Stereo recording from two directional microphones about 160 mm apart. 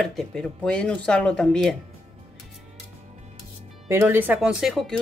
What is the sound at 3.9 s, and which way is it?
Speech, 10° right (ahead or behind).